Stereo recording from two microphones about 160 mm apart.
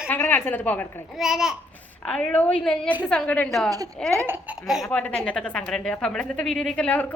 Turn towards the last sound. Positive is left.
turn(degrees=10)  # may be behind; listen again after turning